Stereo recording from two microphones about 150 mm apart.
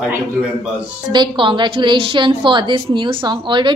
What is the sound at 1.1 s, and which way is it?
A woman's voice, 30° right (ahead or behind).